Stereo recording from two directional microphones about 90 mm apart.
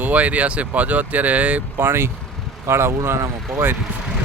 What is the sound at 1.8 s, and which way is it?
Speech, 25° right (ahead or behind).